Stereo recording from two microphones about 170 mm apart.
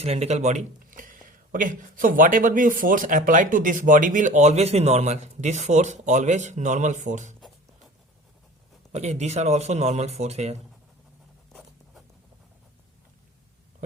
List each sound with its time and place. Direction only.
0.0 s speech: 40° right (ahead or behind)
8.9 s speech: 40° right (ahead or behind)